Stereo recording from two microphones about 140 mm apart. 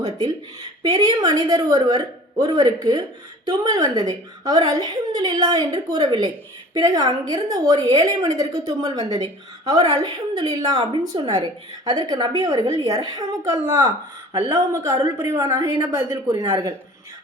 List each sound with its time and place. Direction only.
0.0 s a woman's voice: 30° right (ahead or behind)